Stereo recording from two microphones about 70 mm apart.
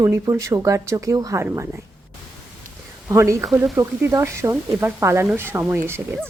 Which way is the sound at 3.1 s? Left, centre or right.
Right.